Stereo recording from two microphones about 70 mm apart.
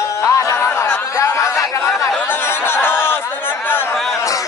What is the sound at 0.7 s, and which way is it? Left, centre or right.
Chatter, left.